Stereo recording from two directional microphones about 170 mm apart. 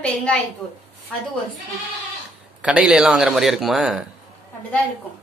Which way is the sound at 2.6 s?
5° right (ahead or behind).